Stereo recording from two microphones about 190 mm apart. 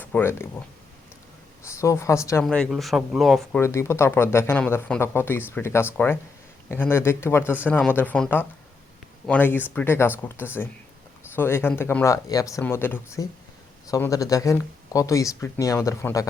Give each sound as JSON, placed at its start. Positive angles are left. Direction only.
{"t": 0.0, "sound": "speech", "side_deg": 10}
{"t": 1.6, "sound": "speech", "side_deg": 15}
{"t": 2.4, "sound": "speech", "side_deg": 5}
{"t": 3.6, "sound": "speech", "side_deg": 15}